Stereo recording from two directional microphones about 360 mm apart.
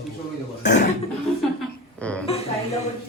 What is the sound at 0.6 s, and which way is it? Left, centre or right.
Speech, left.